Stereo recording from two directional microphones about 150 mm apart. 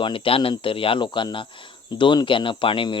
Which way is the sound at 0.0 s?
35° left (ahead or behind).